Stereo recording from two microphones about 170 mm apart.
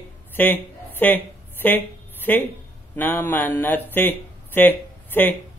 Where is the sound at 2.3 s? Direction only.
10° left (ahead or behind).